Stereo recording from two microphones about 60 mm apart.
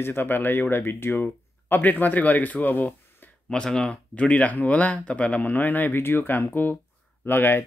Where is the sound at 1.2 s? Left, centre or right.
Left.